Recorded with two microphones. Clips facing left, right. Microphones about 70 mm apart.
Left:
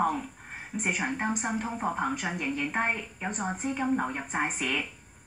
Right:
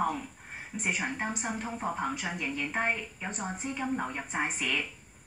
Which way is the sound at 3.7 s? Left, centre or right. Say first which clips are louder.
Left 4 dB; centre.